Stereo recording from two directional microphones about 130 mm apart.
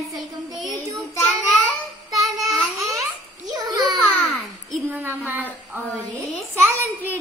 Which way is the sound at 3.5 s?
35° right (ahead or behind).